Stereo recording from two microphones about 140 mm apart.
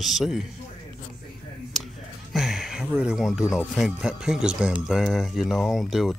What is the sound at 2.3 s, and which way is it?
Speech, centre (ahead or behind).